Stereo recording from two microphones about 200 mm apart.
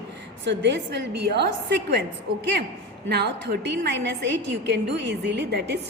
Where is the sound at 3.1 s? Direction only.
55° right (ahead or behind).